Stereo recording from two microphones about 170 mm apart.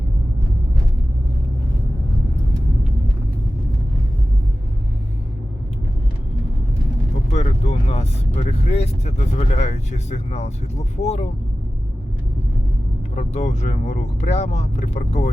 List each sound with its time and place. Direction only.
7.3 s speech: 40° left (ahead or behind)
13.1 s speech: 40° left (ahead or behind)